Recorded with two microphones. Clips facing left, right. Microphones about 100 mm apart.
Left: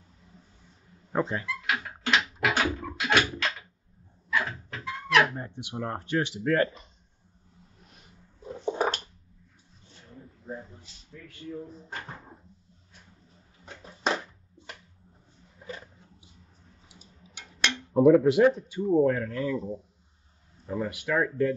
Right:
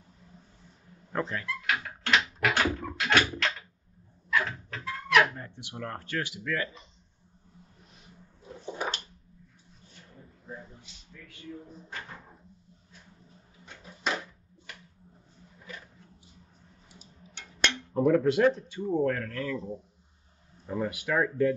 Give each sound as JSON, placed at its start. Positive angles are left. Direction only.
{"t": 1.1, "sound": "speech", "side_deg": 20}
{"t": 1.7, "sound": "a sound", "side_deg": 5}
{"t": 5.3, "sound": "speech", "side_deg": 20}
{"t": 6.4, "sound": "speech", "side_deg": 45}
{"t": 8.7, "sound": "a sound", "side_deg": 40}
{"t": 10.4, "sound": "a sound", "side_deg": 35}
{"t": 17.3, "sound": "cutlery", "side_deg": 10}
{"t": 18.9, "sound": "speech", "side_deg": 15}
{"t": 20.6, "sound": "speech", "side_deg": -10}